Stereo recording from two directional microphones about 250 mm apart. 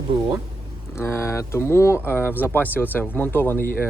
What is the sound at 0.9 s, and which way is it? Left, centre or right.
Speech, centre.